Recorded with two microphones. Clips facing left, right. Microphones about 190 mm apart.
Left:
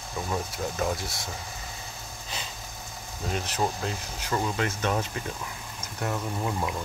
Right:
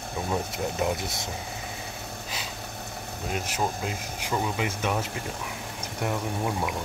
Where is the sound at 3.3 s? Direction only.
10° right (ahead or behind).